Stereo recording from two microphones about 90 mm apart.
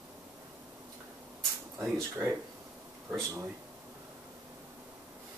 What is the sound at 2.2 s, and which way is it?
Speech, 25° right (ahead or behind).